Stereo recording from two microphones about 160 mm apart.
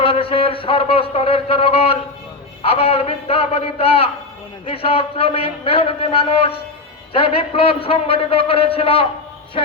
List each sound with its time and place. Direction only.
0.0 s a man's voice: 35° left (ahead or behind)